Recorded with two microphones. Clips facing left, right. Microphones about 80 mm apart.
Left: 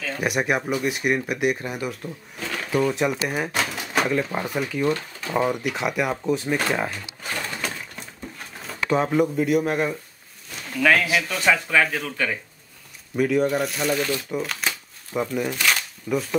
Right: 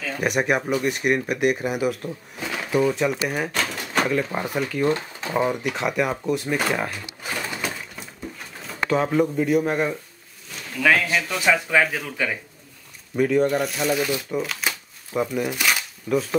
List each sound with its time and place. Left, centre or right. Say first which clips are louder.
0.2 s speech: right 2 dB; centre
2.9 s speech: right 1 dB; centre
4.8 s speech: right 1 dB; right
5.3 s speech: even; centre
6.5 s pigeon: even; centre
8.9 s speech: even; centre
11.3 s speech: right 1 dB; centre
15.5 s a sound: even; centre
16.1 s speech: right 2 dB; centre